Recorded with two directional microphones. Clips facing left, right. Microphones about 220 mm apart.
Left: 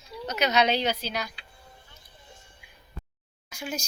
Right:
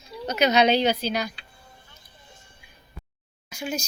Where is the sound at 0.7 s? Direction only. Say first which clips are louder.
Right 5 dB; 5° left (ahead or behind).